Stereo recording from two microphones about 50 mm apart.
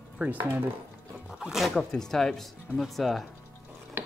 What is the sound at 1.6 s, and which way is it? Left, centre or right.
Speech, centre.